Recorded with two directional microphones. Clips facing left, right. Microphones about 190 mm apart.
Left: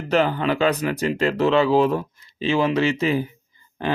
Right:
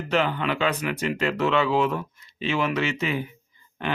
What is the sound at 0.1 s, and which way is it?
Speech, 35° left (ahead or behind).